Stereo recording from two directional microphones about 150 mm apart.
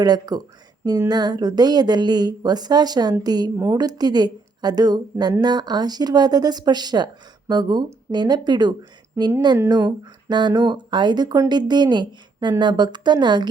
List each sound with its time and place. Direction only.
0.0 s a woman's voice: 25° right (ahead or behind)